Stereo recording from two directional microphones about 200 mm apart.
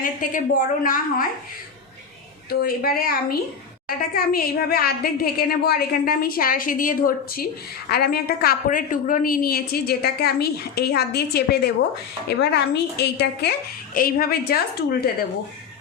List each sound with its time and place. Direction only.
0.0 s a woman's voice: 40° left (ahead or behind)
2.5 s a woman's voice: 50° left (ahead or behind)
13.9 s a woman's voice: 45° left (ahead or behind)